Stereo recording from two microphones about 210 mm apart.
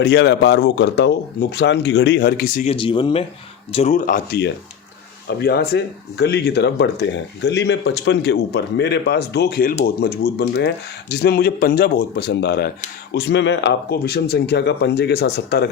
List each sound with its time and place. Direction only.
0.0 s speech: 55° left (ahead or behind)
2.6 s speech: 25° left (ahead or behind); by 15.7 s 50° left (ahead or behind)